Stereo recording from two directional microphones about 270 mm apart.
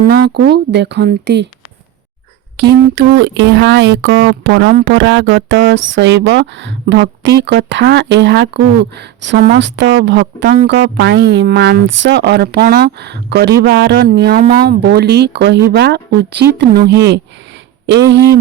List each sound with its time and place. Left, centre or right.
0.0 s speech: right
2.6 s speech: right